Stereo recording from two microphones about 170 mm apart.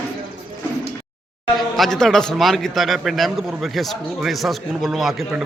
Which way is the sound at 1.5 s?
Centre (ahead or behind).